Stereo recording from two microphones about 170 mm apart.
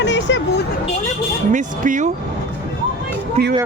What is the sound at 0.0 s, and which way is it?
Vehicle, 90° left.